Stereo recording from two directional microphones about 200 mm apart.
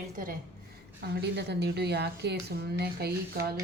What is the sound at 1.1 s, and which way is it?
Speech, 55° right (ahead or behind).